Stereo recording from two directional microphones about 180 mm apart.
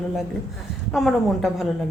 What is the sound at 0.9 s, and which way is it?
Speech, centre (ahead or behind).